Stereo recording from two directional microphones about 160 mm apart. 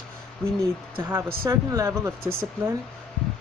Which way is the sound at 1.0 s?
20° right (ahead or behind).